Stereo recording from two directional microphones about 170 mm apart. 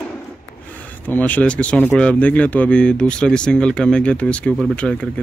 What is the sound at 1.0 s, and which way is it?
Speech, 10° left (ahead or behind).